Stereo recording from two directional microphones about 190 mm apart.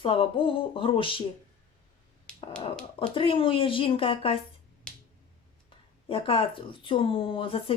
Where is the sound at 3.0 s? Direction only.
25° left (ahead or behind).